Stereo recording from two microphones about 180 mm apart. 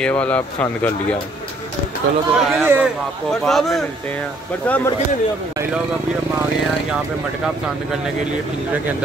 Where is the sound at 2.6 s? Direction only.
10° right (ahead or behind).